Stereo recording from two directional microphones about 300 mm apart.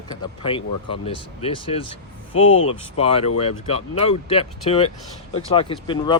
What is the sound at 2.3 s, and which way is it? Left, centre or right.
Speech, left.